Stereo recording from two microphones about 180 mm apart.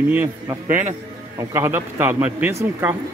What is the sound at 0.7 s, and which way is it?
Speech, 45° right (ahead or behind).